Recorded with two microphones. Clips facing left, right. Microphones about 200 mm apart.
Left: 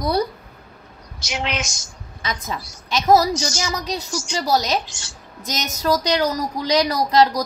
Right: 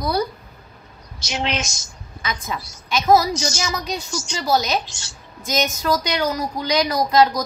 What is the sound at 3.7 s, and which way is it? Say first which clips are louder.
A woman's voice: left 1 dB; 35° left (ahead or behind).